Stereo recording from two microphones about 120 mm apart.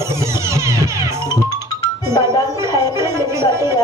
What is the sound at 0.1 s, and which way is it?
Music, 25° right (ahead or behind).